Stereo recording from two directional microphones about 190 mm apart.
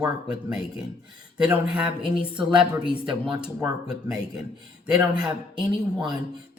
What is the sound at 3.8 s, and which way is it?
Speech, 5° right (ahead or behind).